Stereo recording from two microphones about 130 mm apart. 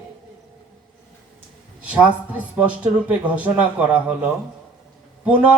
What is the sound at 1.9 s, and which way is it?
A man's voice, 10° right (ahead or behind).